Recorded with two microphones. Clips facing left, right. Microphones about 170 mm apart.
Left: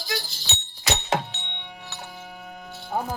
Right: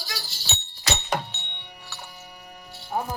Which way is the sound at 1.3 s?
90° left.